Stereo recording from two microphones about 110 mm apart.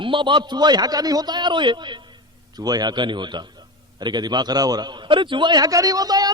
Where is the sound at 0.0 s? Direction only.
50° right (ahead or behind).